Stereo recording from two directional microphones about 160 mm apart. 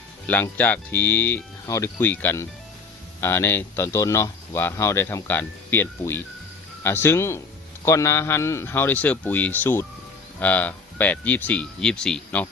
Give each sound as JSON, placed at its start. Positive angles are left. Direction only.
{"t": 0.3, "sound": "speech", "side_deg": 10}